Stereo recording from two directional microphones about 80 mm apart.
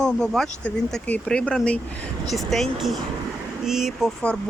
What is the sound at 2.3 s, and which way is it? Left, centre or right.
Speech, centre.